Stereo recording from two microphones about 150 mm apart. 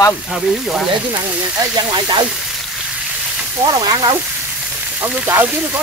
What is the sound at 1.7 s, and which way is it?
Speech, 30° right (ahead or behind).